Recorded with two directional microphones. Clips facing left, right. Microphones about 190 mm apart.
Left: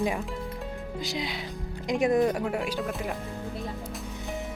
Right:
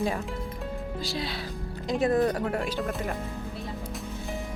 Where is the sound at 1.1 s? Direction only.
15° left (ahead or behind).